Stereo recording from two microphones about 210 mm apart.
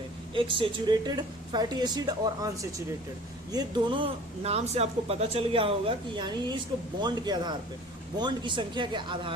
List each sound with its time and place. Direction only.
0.3 s speech: 25° right (ahead or behind)